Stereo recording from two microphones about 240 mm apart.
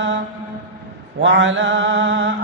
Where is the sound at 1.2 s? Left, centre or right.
Right.